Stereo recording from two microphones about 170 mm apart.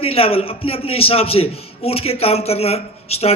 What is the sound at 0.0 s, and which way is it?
A man's voice, 35° left (ahead or behind).